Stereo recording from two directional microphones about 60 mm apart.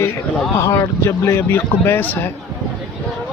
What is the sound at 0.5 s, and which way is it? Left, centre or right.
Speech, left.